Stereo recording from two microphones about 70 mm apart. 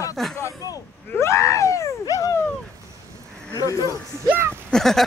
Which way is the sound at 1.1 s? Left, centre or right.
Left.